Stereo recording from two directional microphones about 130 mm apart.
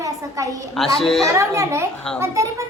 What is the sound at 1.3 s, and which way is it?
A woman's voice, 25° right (ahead or behind).